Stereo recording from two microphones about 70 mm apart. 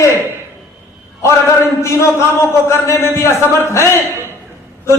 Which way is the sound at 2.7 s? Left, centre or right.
Left.